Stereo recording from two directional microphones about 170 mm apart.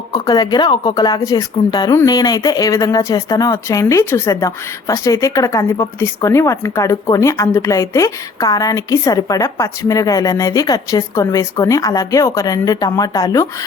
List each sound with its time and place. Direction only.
0.1 s speech: 25° left (ahead or behind)